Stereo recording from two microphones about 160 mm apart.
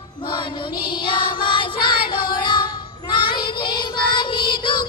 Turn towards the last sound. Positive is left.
turn(degrees=30)  # may be behind; listen again after turning